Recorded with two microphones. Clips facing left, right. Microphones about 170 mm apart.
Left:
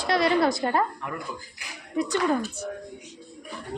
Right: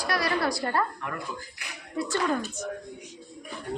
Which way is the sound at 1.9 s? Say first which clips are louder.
Left 4 dB; 15° left (ahead or behind).